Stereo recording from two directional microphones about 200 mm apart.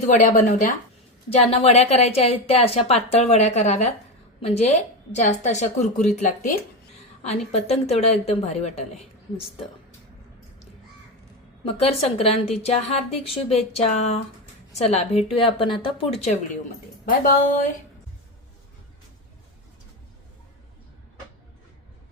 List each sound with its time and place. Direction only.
0.0 s speech: 40° left (ahead or behind)
11.8 s a woman's voice: 30° left (ahead or behind)